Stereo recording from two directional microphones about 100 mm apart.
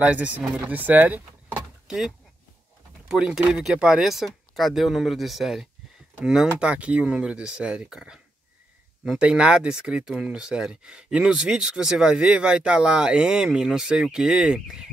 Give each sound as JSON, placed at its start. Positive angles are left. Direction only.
{"t": 0.0, "sound": "speech", "side_deg": -15}
{"t": 3.1, "sound": "speech", "side_deg": -10}